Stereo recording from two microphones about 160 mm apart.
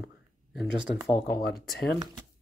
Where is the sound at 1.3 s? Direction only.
65° left (ahead or behind).